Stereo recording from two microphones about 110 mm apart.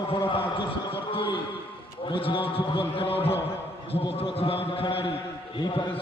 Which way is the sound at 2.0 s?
50° left (ahead or behind).